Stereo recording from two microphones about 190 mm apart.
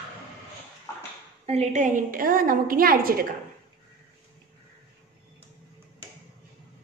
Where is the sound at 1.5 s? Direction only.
35° right (ahead or behind).